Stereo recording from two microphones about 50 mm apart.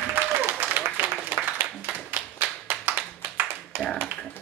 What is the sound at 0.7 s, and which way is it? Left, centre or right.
Applause, right.